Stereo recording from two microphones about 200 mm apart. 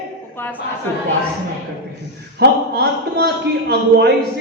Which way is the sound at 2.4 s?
55° right (ahead or behind).